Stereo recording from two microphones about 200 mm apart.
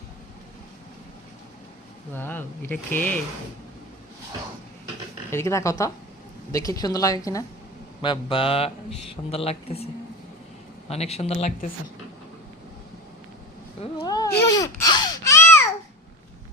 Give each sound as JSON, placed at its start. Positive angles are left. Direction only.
{"t": 2.1, "sound": "speech", "side_deg": 10}
{"t": 5.3, "sound": "speech", "side_deg": 15}
{"t": 13.8, "sound": "baby cry", "side_deg": 25}